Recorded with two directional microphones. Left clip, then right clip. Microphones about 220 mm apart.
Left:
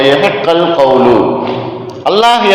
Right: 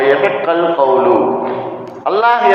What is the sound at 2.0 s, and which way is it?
Speech, 55° left (ahead or behind).